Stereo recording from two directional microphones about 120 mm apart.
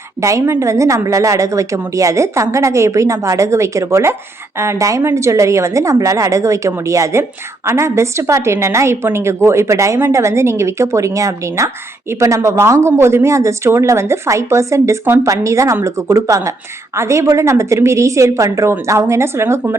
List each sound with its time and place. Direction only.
0.2 s a woman's voice: 25° right (ahead or behind)